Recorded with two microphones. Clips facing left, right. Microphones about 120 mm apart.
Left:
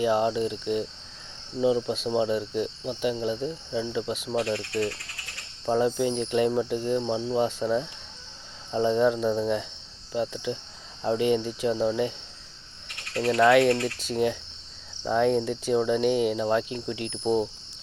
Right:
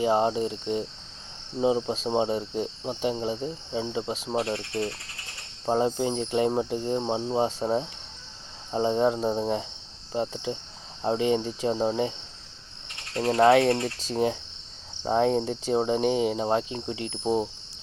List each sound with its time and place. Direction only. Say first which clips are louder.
0.0 s cricket: even; 30° right (ahead or behind)
13.1 s cricket: even; 35° right (ahead or behind)